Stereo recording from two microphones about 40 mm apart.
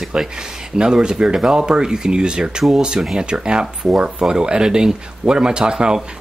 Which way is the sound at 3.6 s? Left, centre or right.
Centre.